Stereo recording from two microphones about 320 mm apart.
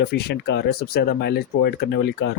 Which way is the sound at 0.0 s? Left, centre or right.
Left.